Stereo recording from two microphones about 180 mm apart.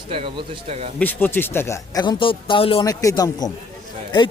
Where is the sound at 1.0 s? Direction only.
10° left (ahead or behind); by 2.8 s 30° left (ahead or behind).